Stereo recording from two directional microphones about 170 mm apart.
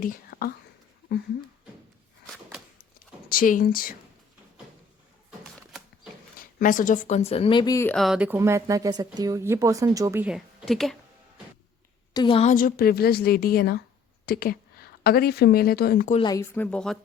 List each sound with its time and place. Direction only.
0.0 s a woman's voice: 55° left (ahead or behind)
3.2 s speech: 55° left (ahead or behind)
6.6 s speech: 50° left (ahead or behind); by 7.9 s 20° left (ahead or behind)
7.9 s speech: centre (ahead or behind)
12.1 s a woman's voice: 30° left (ahead or behind)
12.5 s a woman's voice: 55° left (ahead or behind)
16.2 s speech: 20° left (ahead or behind); by 17.0 s 5° left (ahead or behind)